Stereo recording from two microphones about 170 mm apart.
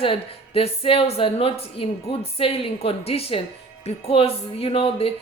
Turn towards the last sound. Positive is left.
turn(degrees=35)  # may be behind; listen again after turning